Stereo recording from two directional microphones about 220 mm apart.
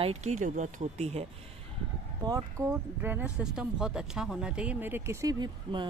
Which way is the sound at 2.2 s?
15° right (ahead or behind).